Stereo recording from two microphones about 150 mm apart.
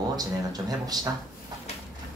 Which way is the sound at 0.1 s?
25° right (ahead or behind).